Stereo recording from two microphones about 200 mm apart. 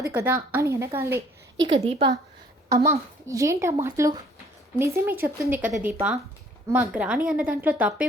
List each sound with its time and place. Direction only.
0.0 s speech: 10° right (ahead or behind)
1.6 s a woman's voice: 30° right (ahead or behind)
3.2 s speech: 15° right (ahead or behind)